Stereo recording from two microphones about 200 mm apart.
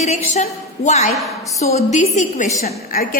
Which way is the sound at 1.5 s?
35° left (ahead or behind).